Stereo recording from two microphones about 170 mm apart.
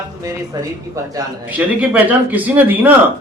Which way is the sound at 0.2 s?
20° right (ahead or behind).